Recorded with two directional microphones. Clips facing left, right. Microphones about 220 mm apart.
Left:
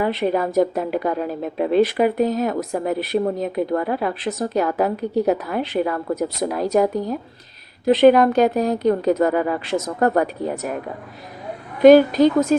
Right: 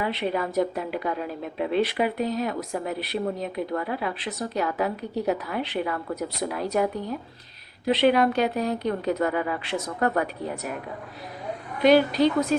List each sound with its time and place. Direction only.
0.0 s a woman's voice: 45° left (ahead or behind)
11.8 s a woman's voice: 45° left (ahead or behind)